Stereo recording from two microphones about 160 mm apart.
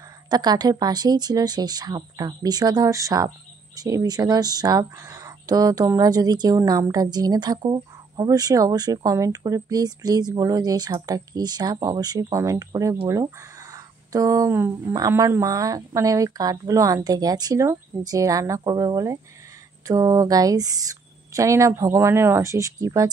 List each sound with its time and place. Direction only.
0.3 s speech: 25° right (ahead or behind)